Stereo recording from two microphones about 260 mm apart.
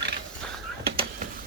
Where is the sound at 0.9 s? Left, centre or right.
Right.